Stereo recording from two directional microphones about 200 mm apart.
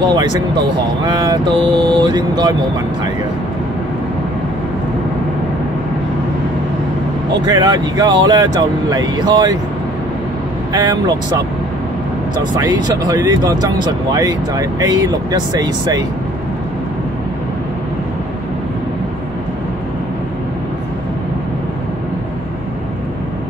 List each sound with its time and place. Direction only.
1.0 s speech: 20° right (ahead or behind)
7.4 s speech: 20° right (ahead or behind)
10.7 s speech: 20° right (ahead or behind)
12.5 s speech: 20° right (ahead or behind)